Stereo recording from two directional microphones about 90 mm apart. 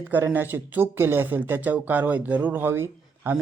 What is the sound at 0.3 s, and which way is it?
Speech, 25° right (ahead or behind).